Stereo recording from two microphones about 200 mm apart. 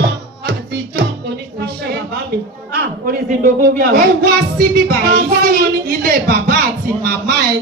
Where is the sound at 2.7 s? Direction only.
45° right (ahead or behind).